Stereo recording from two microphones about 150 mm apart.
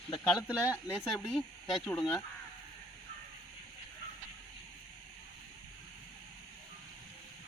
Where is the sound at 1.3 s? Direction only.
Centre (ahead or behind).